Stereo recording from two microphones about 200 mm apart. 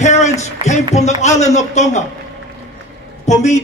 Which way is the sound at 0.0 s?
35° left (ahead or behind).